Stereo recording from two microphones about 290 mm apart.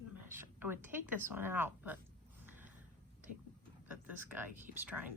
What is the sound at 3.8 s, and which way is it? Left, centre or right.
Speech, centre.